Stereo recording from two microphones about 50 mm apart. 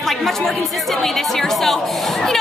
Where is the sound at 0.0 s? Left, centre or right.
Centre.